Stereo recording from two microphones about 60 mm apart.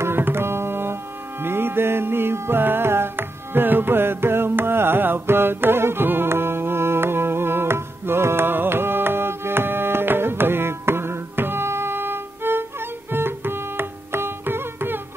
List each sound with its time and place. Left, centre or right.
0.0 s tabla: right
1.4 s music: right